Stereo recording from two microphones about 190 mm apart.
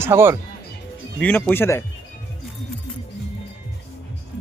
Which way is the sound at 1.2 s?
10° left (ahead or behind).